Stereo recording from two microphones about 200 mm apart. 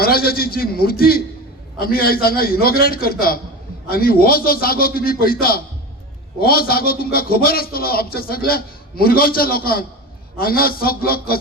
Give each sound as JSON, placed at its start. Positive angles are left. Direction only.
{"t": 0.0, "sound": "a man's voice", "side_deg": 50}